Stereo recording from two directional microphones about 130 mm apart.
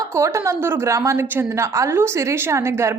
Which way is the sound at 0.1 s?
20° right (ahead or behind).